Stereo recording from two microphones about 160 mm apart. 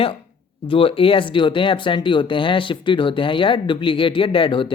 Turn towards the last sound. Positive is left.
turn(degrees=30)  # may be behind; listen again after turning